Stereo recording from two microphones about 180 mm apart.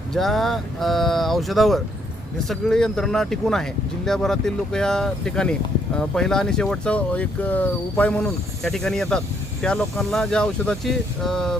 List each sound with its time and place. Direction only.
0.1 s speech: centre (ahead or behind)